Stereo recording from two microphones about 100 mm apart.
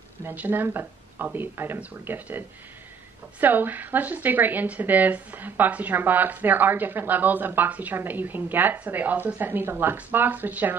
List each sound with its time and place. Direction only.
0.2 s speech: 20° right (ahead or behind)